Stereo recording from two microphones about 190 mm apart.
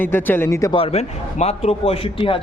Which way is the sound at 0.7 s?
30° left (ahead or behind).